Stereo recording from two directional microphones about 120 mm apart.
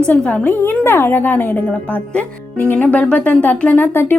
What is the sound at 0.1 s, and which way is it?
A woman's voice, 10° left (ahead or behind).